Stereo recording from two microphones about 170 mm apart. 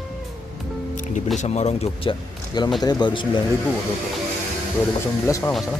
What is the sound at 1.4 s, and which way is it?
Speech, 40° left (ahead or behind).